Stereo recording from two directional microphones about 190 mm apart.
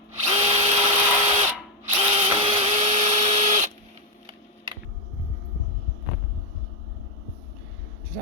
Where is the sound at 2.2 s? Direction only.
30° right (ahead or behind).